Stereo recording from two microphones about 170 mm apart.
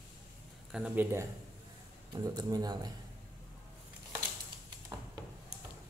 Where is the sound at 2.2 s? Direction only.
20° right (ahead or behind).